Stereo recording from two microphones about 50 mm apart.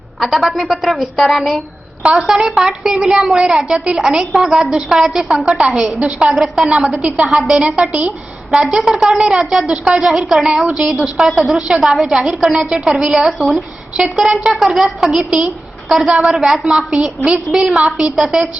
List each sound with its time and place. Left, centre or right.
0.3 s a woman's voice: centre
2.1 s a woman's voice: centre
10.1 s a woman's voice: centre
13.9 s a woman's voice: centre
17.8 s a woman's voice: centre